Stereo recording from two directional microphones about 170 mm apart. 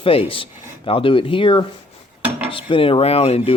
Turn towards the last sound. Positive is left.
turn(degrees=35)  # may be behind; listen again after turning